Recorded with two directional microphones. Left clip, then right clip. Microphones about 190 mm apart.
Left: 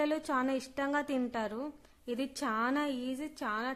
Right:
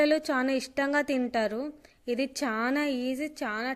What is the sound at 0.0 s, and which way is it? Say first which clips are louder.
A woman's voice: right 7 dB; 15° right (ahead or behind).